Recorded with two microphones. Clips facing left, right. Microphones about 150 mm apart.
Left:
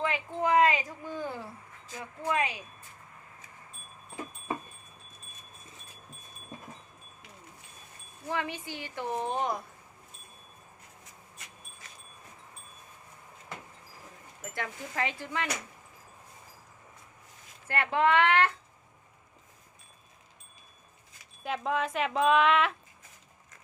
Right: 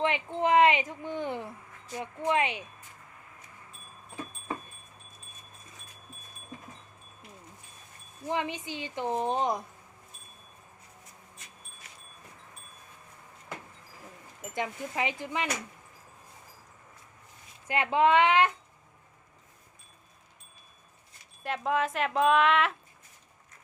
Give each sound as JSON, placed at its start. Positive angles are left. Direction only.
{"t": 0.0, "sound": "speech", "side_deg": -25}
{"t": 8.3, "sound": "speech", "side_deg": -20}
{"t": 14.4, "sound": "speech", "side_deg": -15}
{"t": 17.7, "sound": "speech", "side_deg": -20}
{"t": 21.4, "sound": "speech", "side_deg": 0}